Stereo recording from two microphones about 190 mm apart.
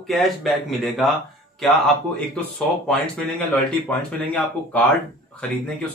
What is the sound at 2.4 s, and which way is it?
Speech, 5° left (ahead or behind).